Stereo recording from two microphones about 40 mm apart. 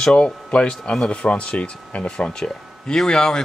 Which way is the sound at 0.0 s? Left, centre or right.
Left.